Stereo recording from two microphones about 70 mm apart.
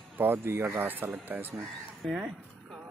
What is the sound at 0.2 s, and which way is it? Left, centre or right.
Speech, right.